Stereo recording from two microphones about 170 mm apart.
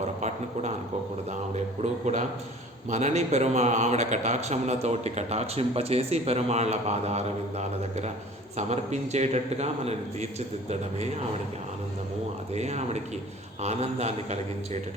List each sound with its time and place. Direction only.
0.2 s a man's voice: 45° right (ahead or behind)
8.5 s a man's voice: 40° right (ahead or behind)
12.5 s a man's voice: 40° right (ahead or behind)